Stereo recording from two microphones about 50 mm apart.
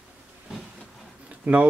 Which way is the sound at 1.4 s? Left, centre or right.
Right.